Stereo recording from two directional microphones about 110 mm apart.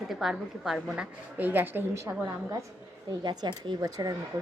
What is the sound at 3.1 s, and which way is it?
A woman's voice, 40° right (ahead or behind).